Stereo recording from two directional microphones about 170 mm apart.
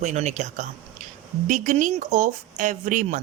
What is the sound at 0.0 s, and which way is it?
Speech, 45° right (ahead or behind).